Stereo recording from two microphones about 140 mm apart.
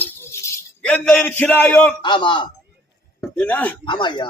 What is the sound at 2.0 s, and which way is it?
Speech, 35° left (ahead or behind).